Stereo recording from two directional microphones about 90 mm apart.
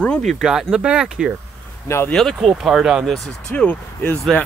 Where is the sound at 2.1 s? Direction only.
5° left (ahead or behind).